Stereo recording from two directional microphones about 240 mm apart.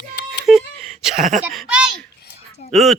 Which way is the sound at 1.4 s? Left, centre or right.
Centre.